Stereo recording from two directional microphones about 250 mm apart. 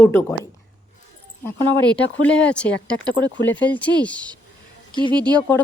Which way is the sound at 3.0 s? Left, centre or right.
Centre.